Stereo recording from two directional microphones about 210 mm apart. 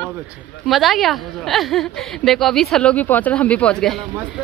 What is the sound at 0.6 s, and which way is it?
Speech, centre (ahead or behind).